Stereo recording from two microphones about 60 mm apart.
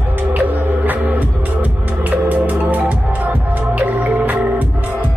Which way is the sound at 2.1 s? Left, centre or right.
Right.